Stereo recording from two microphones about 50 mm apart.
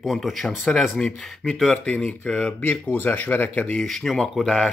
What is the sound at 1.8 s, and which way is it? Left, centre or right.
Speech, left.